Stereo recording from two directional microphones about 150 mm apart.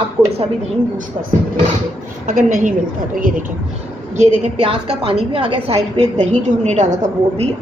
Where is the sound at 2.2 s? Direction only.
60° right (ahead or behind).